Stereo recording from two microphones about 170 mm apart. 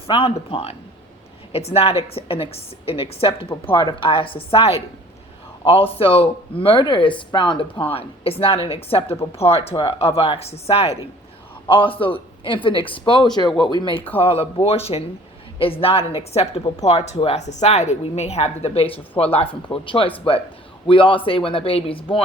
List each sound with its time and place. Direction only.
0.1 s a woman's voice: 35° left (ahead or behind)